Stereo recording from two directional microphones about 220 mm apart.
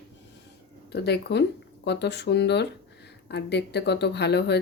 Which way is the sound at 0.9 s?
50° left (ahead or behind).